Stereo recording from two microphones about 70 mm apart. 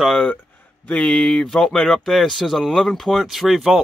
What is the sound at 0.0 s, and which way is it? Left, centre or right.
Speech, centre.